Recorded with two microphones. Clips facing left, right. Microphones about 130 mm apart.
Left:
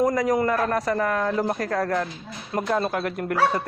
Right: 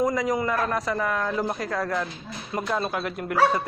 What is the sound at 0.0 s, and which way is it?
A man's voice, 45° left (ahead or behind).